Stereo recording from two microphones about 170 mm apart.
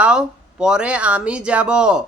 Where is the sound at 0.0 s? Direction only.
5° right (ahead or behind).